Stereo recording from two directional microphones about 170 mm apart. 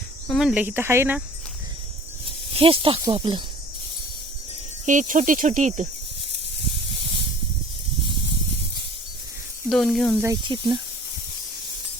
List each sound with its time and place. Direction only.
0.3 s speech: 5° right (ahead or behind)
2.5 s speech: 35° right (ahead or behind)
4.9 s speech: 50° right (ahead or behind)
9.6 s speech: centre (ahead or behind)
10.4 s speech: 25° right (ahead or behind)